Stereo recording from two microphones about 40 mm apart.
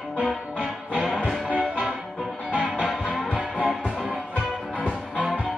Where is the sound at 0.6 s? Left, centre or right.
Right.